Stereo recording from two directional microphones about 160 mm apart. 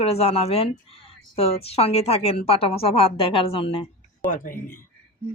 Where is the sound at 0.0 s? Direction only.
40° left (ahead or behind).